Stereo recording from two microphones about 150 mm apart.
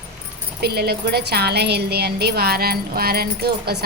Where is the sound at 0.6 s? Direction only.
90° right.